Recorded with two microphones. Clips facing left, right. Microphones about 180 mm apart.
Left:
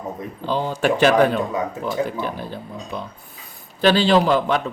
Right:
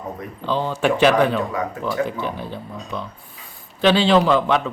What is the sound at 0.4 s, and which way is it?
Speech, 40° left (ahead or behind).